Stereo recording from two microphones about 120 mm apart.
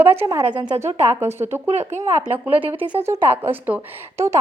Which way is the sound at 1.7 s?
70° right (ahead or behind).